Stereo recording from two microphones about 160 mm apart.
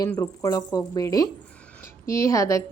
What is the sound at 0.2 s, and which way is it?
A woman's voice, 20° left (ahead or behind).